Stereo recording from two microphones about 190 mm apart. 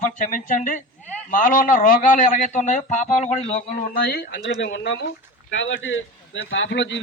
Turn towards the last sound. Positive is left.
turn(degrees=70)  # may be behind; listen again after turning